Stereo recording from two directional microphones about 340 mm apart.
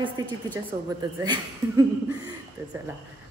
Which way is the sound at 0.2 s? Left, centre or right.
Centre.